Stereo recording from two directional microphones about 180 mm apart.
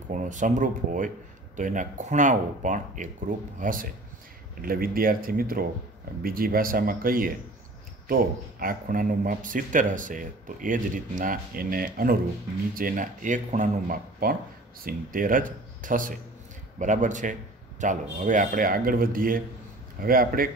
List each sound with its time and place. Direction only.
0.1 s speech: 45° right (ahead or behind)